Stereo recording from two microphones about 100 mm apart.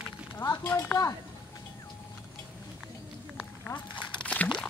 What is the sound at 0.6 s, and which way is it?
Speech, 20° left (ahead or behind).